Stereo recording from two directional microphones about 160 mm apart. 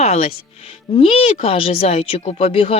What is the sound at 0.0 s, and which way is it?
Speech, 40° left (ahead or behind).